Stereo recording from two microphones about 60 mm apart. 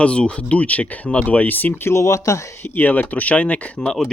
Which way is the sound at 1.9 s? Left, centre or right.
Left.